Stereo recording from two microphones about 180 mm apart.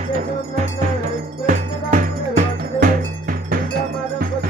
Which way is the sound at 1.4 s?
45° right (ahead or behind).